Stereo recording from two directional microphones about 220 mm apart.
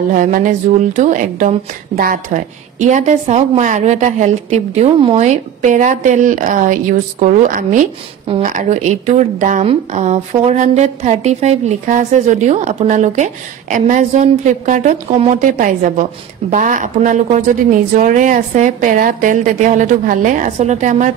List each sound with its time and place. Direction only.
0.1 s a woman's voice: 40° right (ahead or behind)